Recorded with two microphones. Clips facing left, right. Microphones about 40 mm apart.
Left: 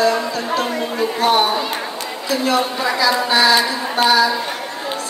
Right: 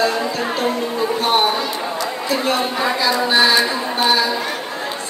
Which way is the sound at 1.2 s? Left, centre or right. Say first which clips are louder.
Left 2 dB; right.